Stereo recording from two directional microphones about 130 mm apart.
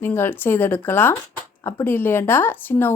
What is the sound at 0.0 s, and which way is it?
A woman's voice, 15° left (ahead or behind).